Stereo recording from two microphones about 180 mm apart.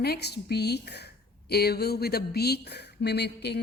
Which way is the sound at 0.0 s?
65° left (ahead or behind).